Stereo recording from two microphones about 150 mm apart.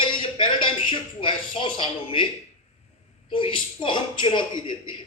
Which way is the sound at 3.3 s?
35° left (ahead or behind).